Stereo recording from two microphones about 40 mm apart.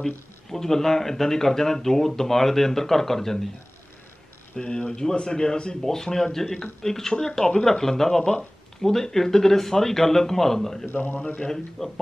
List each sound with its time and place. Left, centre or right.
0.0 s speech: centre
4.6 s speech: left
10.9 s a man's voice: left
11.1 s speech: left
11.4 s speech: centre